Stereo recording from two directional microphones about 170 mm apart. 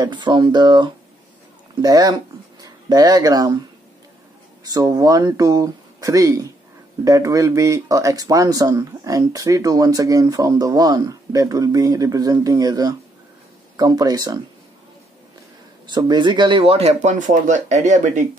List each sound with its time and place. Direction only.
0.0 s speech: 25° right (ahead or behind)
4.6 s speech: 20° right (ahead or behind)
15.9 s speech: 25° right (ahead or behind); by 18.2 s 45° right (ahead or behind)